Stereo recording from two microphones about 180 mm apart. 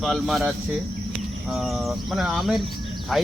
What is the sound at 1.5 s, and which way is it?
Speech, centre (ahead or behind).